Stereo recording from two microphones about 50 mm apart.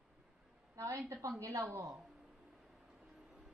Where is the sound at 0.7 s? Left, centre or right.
Right.